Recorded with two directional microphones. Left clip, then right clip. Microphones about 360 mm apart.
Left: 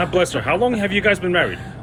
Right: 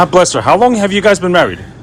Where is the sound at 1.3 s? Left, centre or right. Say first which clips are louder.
Right 8 dB; right.